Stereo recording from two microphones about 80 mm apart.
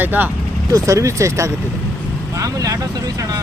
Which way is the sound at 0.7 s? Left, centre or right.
Right.